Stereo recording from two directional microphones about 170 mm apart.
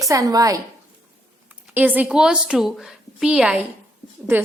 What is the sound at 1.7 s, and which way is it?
A woman's voice, 10° right (ahead or behind).